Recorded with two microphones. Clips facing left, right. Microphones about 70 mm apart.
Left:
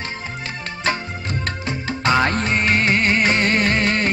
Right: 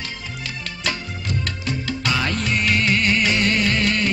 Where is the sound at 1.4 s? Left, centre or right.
Left.